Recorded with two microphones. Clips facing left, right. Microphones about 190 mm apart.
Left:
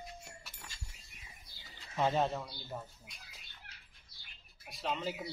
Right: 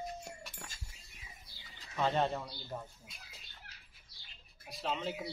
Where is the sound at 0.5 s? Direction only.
45° right (ahead or behind).